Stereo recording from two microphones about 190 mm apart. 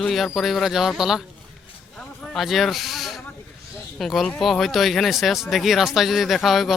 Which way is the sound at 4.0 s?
Centre (ahead or behind).